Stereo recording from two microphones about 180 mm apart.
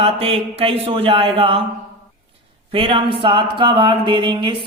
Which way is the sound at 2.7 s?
30° right (ahead or behind).